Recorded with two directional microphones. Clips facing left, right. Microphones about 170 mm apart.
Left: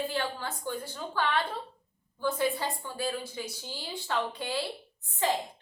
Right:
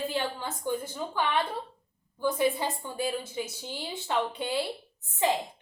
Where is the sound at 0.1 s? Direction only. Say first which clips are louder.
Right 1 dB; 20° right (ahead or behind).